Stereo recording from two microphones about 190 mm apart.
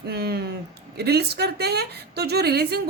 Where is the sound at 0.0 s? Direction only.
55° right (ahead or behind).